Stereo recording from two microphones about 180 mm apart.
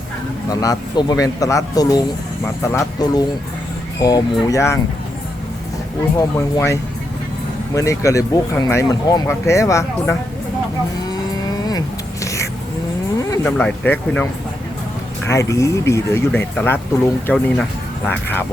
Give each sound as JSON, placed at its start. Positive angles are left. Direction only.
{"t": 0.5, "sound": "speech", "side_deg": 20}
{"t": 6.1, "sound": "speech", "side_deg": 15}
{"t": 12.2, "sound": "whispering", "side_deg": 15}
{"t": 13.1, "sound": "a sound", "side_deg": 20}
{"t": 13.6, "sound": "speech", "side_deg": 10}
{"t": 15.3, "sound": "speech", "side_deg": 15}